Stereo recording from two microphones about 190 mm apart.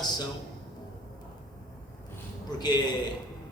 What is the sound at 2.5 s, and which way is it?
Speech, 20° left (ahead or behind).